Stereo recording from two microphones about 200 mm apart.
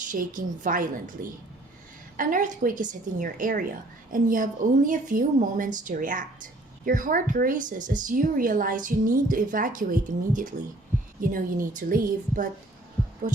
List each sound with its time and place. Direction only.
0.1 s a woman's voice: 45° right (ahead or behind)
2.1 s a woman's voice: 40° right (ahead or behind)